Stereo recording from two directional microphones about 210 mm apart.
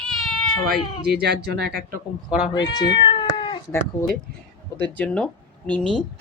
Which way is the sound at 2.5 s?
20° left (ahead or behind).